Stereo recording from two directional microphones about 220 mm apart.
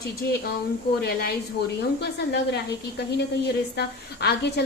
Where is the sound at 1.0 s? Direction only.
45° left (ahead or behind).